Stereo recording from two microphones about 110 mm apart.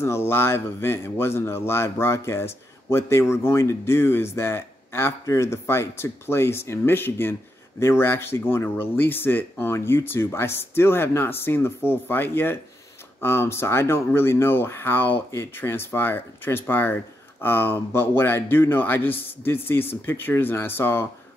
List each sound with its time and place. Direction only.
0.0 s a man's voice: 20° left (ahead or behind)